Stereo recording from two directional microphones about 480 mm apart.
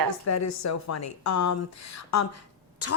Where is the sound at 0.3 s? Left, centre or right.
Left.